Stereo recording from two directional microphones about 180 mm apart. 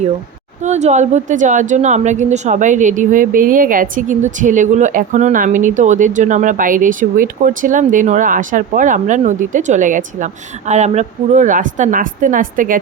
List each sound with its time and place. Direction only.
0.6 s speech: 40° right (ahead or behind)